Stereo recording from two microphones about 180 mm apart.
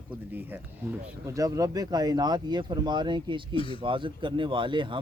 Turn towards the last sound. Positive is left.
turn(degrees=-25)  # may be behind; listen again after turning